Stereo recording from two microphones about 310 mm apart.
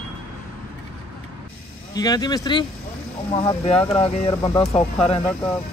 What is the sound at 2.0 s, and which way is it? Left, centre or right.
Speech, centre.